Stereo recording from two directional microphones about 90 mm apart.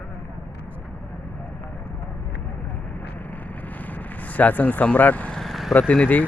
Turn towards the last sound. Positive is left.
turn(degrees=15)  # may be behind; listen again after turning